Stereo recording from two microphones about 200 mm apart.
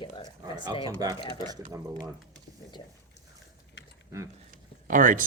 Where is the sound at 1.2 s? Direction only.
20° left (ahead or behind).